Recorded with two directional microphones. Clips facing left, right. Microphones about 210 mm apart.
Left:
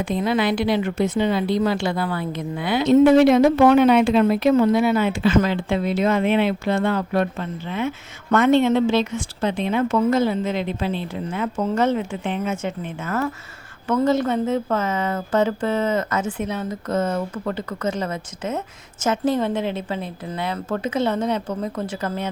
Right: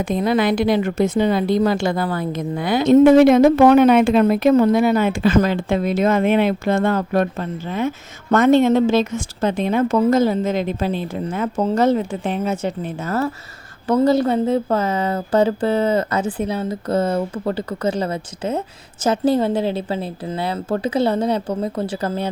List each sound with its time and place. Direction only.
0.0 s a woman's voice: 45° right (ahead or behind)